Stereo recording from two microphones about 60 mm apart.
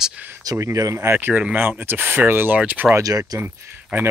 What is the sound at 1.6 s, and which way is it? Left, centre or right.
Speech, right.